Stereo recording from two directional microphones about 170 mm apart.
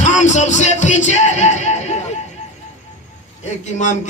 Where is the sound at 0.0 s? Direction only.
45° left (ahead or behind).